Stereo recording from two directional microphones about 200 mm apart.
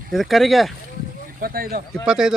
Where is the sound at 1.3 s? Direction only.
45° right (ahead or behind).